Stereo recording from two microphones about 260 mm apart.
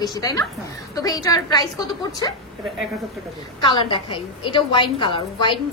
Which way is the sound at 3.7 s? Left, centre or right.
Centre.